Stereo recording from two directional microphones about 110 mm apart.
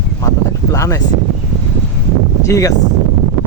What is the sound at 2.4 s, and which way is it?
Speech, 30° left (ahead or behind).